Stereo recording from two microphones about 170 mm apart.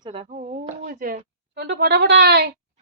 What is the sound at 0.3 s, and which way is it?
Speech, 45° right (ahead or behind).